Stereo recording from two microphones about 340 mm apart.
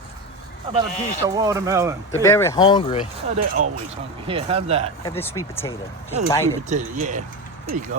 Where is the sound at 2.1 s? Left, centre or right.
Centre.